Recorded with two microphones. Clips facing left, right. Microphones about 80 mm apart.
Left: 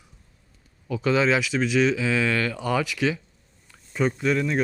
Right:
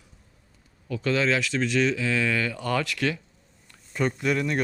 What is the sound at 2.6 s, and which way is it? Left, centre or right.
Speech, centre.